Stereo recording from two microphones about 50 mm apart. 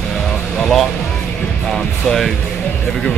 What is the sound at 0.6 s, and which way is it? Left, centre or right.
Speech, centre.